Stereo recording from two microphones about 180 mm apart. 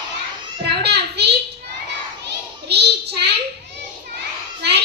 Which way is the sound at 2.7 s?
65° right (ahead or behind).